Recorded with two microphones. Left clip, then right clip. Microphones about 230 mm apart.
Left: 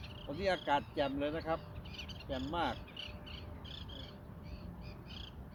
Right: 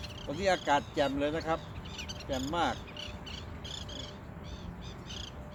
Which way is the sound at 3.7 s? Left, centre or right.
Right.